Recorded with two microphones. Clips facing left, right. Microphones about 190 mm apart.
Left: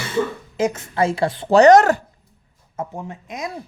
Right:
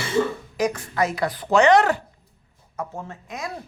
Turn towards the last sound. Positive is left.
turn(degrees=20)  # may be behind; listen again after turning